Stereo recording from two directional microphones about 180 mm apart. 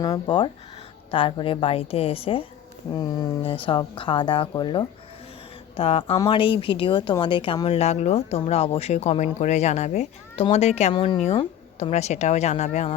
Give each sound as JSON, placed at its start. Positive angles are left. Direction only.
{"t": 0.0, "sound": "speech", "side_deg": 25}